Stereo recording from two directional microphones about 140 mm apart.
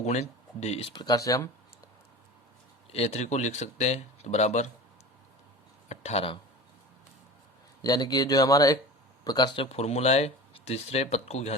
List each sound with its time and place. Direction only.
0.0 s speech: 55° left (ahead or behind)
0.9 s speech: 25° left (ahead or behind)
2.9 s speech: 50° left (ahead or behind)
5.9 s speech: 50° left (ahead or behind)
7.8 s speech: 30° left (ahead or behind)
9.7 s speech: 50° left (ahead or behind)